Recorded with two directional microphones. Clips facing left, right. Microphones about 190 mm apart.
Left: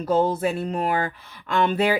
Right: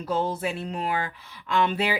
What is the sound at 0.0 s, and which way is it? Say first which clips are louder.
Speech: left 6 dB; 45° left (ahead or behind).